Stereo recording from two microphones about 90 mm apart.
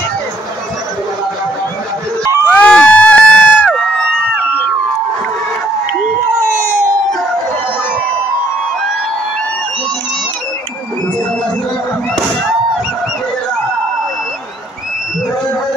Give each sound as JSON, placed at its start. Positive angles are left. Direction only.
{"t": 2.5, "sound": "crowd", "side_deg": 10}